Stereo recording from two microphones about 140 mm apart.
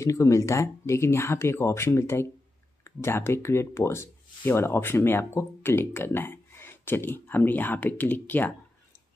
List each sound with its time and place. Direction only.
0.0 s speech: 20° left (ahead or behind)